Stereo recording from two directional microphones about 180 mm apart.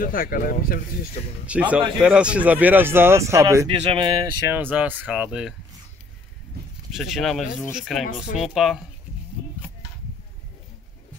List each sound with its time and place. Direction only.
0.0 s speech: 50° left (ahead or behind)
1.4 s speech: 5° right (ahead or behind)
3.6 s speech: 30° right (ahead or behind)
4.5 s speech: 10° right (ahead or behind)
6.9 s speech: centre (ahead or behind)
8.0 s speech: 45° left (ahead or behind)
8.4 s speech: centre (ahead or behind)